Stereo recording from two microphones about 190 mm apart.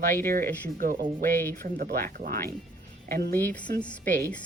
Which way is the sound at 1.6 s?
45° right (ahead or behind).